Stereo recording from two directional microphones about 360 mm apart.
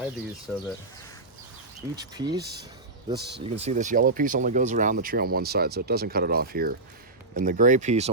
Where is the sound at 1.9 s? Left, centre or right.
Centre.